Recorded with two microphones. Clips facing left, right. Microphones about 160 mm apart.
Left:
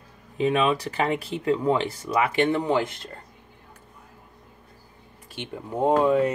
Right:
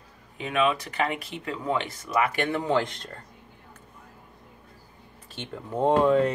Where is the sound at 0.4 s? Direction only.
30° left (ahead or behind).